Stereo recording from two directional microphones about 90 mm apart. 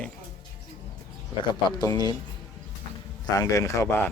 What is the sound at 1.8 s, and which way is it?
Speech, 50° left (ahead or behind).